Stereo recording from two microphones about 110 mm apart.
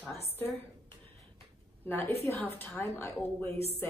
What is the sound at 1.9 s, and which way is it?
A woman's voice, 20° left (ahead or behind).